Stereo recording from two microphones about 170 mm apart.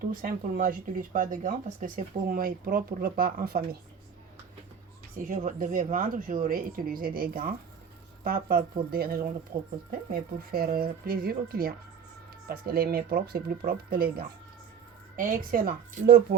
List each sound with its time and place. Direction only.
0.1 s speech: 55° right (ahead or behind)
5.2 s speech: 50° right (ahead or behind)